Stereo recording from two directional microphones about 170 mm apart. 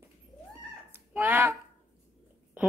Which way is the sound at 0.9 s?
10° right (ahead or behind).